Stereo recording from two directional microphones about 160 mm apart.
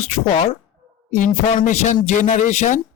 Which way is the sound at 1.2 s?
50° left (ahead or behind).